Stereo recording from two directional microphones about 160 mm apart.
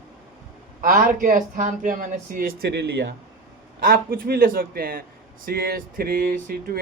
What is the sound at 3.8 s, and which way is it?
Speech, 65° right (ahead or behind).